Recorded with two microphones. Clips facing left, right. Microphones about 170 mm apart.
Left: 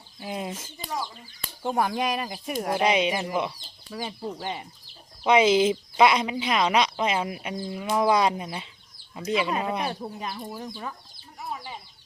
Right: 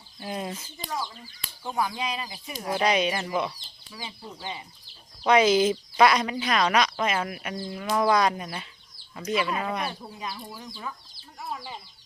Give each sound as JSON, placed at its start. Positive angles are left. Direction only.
{"t": 0.2, "sound": "speech", "side_deg": 10}
{"t": 1.6, "sound": "speech", "side_deg": 50}
{"t": 2.7, "sound": "speech", "side_deg": 20}
{"t": 3.9, "sound": "speech", "side_deg": 45}
{"t": 5.3, "sound": "speech", "side_deg": 25}
{"t": 10.2, "sound": "speech", "side_deg": 45}
{"t": 11.3, "sound": "chicken", "side_deg": 5}